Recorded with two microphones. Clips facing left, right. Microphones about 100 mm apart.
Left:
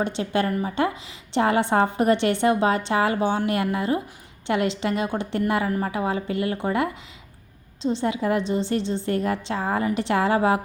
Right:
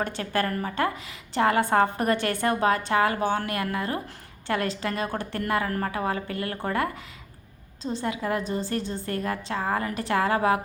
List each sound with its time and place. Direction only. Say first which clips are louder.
0.0 s a woman's voice: left 3 dB; 20° left (ahead or behind)